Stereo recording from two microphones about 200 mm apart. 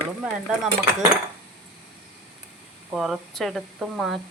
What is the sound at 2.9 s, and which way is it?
Speech, centre (ahead or behind).